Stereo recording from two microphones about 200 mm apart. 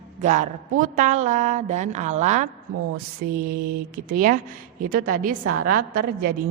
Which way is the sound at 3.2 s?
50° right (ahead or behind).